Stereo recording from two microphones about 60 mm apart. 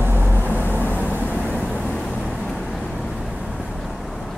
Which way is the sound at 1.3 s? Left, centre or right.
Left.